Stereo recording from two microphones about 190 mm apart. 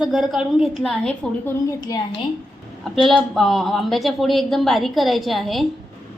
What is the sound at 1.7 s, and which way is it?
Speech, 20° left (ahead or behind).